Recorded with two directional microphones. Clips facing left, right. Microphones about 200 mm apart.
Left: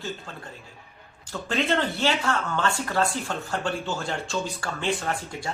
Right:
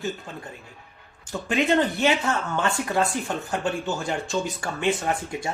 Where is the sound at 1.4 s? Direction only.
15° right (ahead or behind).